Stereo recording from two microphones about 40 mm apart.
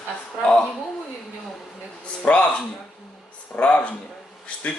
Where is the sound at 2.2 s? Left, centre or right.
Left.